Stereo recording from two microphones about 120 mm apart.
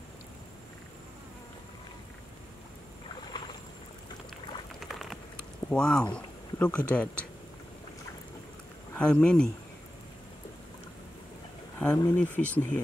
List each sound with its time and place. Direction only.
4.7 s a sound: centre (ahead or behind)
5.7 s speech: 5° left (ahead or behind)
8.9 s speech: 10° left (ahead or behind)
11.8 s speech: 10° left (ahead or behind)